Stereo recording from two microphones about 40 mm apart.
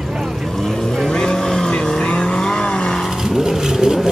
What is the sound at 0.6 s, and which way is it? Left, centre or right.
Vehicle, centre.